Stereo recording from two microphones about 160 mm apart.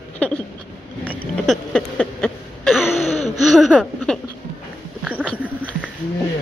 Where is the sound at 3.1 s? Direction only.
40° left (ahead or behind).